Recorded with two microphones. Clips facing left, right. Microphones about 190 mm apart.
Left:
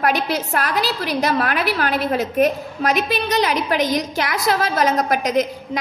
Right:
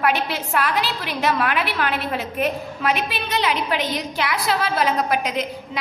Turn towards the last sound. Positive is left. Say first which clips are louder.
# left 6 dB
turn(degrees=45)  # may be behind; listen again after turning